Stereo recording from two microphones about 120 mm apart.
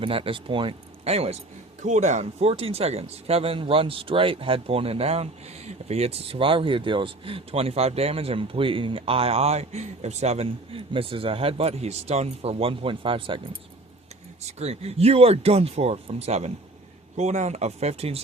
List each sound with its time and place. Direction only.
0.0 s speech: 50° right (ahead or behind)
1.0 s speech: 60° right (ahead or behind)
1.8 s speech: 80° right; by 13.4 s 45° right (ahead or behind)
14.6 s speech: 60° right (ahead or behind)